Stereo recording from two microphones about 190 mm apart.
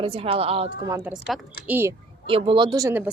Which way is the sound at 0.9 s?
15° right (ahead or behind).